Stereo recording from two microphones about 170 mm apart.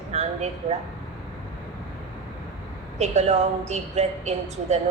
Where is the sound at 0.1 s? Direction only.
40° right (ahead or behind).